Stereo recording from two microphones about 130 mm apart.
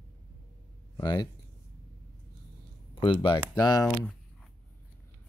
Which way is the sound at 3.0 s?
40° left (ahead or behind).